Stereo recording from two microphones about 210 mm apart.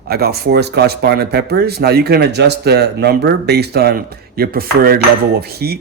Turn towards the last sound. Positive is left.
turn(degrees=-50)  # may be behind; listen again after turning